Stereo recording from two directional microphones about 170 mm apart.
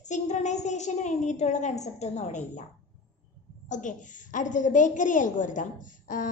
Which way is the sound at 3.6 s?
45° left (ahead or behind).